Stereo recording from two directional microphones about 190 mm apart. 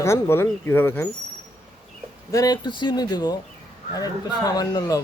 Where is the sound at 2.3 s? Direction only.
20° left (ahead or behind).